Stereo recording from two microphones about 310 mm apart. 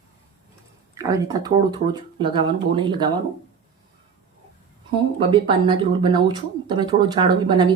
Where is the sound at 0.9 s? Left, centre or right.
Centre.